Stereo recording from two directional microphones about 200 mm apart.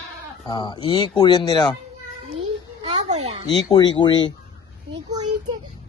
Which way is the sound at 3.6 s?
20° left (ahead or behind).